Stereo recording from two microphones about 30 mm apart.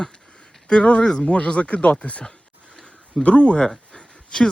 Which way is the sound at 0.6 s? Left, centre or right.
Left.